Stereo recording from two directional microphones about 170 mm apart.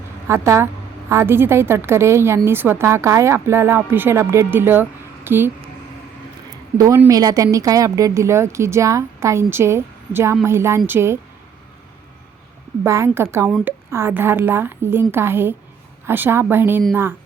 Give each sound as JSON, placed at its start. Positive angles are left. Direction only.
{"t": 0.3, "sound": "speech", "side_deg": -15}
{"t": 6.7, "sound": "speech", "side_deg": -20}
{"t": 12.8, "sound": "speech", "side_deg": -15}